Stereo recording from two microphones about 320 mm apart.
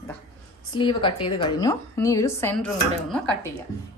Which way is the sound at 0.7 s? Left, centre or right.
Centre.